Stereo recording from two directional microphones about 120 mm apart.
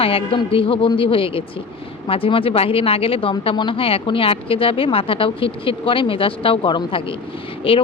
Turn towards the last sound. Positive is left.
turn(degrees=50)  # may be behind; listen again after turning